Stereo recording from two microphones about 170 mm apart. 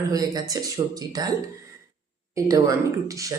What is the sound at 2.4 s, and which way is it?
Speech, 20° right (ahead or behind).